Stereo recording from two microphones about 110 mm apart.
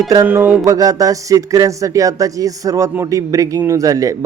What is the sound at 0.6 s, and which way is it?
Speech, 30° right (ahead or behind).